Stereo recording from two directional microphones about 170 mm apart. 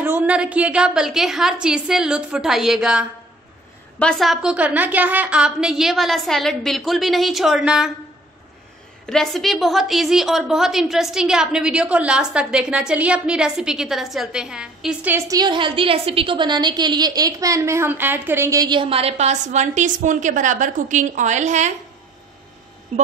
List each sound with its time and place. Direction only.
0.0 s a woman's voice: 10° right (ahead or behind)
9.0 s a woman's voice: 5° left (ahead or behind); by 21.7 s 45° right (ahead or behind)
22.9 s speech: 45° right (ahead or behind)